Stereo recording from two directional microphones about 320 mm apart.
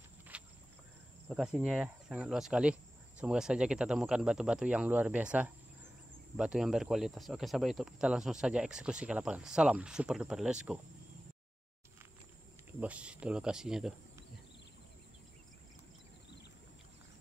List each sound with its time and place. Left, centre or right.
0.3 s a sound: centre
1.3 s speech: centre
12.8 s speech: centre